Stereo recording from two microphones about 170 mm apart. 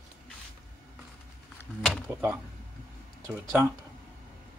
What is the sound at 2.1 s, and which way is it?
Speech, 10° right (ahead or behind).